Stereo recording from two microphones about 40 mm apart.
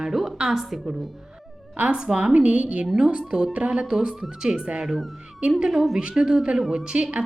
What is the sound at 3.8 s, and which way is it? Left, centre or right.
Speech, right.